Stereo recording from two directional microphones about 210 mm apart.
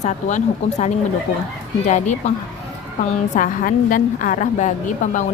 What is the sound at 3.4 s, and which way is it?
Speech, 40° left (ahead or behind).